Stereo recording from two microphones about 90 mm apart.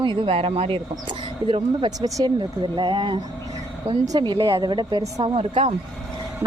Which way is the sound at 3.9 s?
90° right.